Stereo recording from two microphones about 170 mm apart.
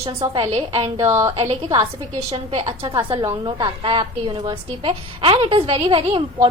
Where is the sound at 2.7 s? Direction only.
25° right (ahead or behind).